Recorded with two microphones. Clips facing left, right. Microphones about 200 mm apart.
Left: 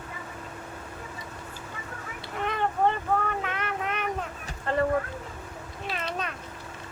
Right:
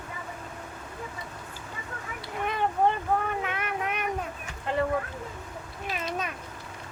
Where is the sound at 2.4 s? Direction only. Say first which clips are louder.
Even; 15° right (ahead or behind).